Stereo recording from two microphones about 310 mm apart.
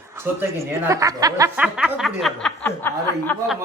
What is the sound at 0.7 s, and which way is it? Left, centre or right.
Speech, centre.